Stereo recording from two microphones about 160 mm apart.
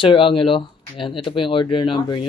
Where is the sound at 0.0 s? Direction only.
35° left (ahead or behind).